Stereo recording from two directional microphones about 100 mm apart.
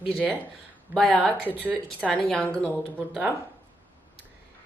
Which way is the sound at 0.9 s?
Centre (ahead or behind).